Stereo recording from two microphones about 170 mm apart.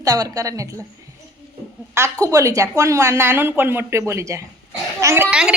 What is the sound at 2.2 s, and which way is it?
Speech, 20° right (ahead or behind).